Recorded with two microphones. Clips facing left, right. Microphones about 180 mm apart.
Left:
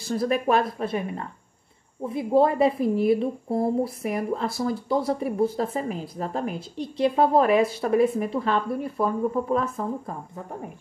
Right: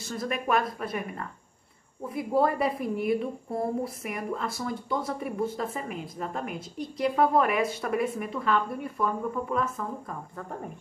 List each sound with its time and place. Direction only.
0.0 s a woman's voice: 35° left (ahead or behind)